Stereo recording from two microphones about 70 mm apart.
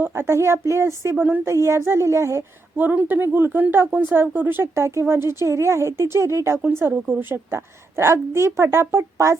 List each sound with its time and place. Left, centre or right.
0.0 s a woman's voice: right
2.7 s a woman's voice: right